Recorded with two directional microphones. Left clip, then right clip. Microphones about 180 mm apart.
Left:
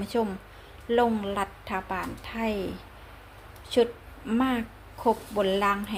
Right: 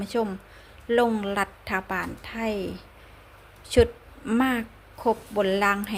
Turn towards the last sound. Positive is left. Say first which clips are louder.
# right 2 dB
turn(degrees=-25)  # may be behind; listen again after turning